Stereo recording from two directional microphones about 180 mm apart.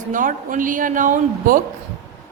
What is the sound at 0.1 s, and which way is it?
A woman's voice, 45° right (ahead or behind).